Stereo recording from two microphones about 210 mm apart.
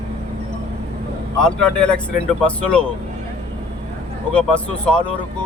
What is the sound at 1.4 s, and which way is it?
Speech, 5° left (ahead or behind).